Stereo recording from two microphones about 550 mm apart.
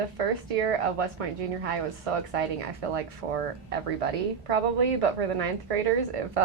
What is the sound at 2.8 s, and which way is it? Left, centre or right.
Speech, right.